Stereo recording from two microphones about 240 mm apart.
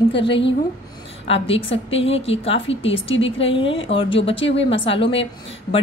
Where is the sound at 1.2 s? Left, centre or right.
Left.